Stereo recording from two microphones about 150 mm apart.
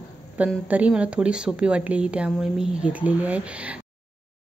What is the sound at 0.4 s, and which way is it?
Speech, 10° right (ahead or behind).